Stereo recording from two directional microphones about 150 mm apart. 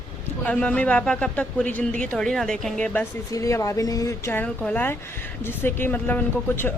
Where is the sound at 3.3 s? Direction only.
20° left (ahead or behind).